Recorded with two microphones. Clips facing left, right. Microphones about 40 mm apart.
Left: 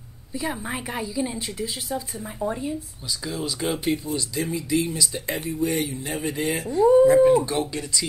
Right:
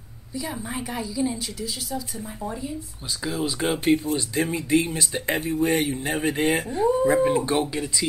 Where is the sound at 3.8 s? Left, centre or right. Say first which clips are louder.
Right 4 dB; right.